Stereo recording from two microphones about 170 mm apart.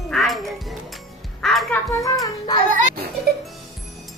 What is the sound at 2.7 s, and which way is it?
Speech, 50° right (ahead or behind).